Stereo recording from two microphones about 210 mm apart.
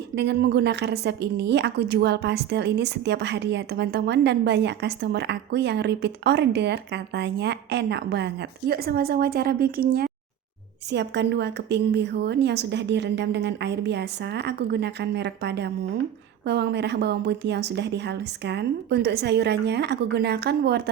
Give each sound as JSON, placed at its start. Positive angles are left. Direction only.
{"t": 0.2, "sound": "a woman's voice", "side_deg": -55}